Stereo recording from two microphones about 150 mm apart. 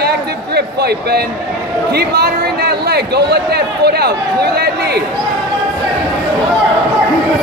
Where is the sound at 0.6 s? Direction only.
90° right.